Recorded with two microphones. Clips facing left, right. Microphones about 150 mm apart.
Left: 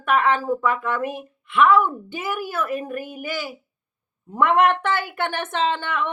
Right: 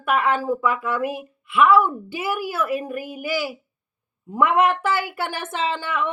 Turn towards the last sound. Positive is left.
turn(degrees=-5)  # may be behind; listen again after turning